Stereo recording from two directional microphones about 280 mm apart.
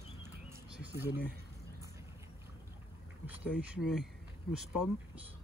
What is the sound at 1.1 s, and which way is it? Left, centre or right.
Speech, left.